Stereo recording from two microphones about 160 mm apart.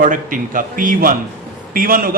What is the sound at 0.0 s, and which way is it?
A man's voice, 55° right (ahead or behind).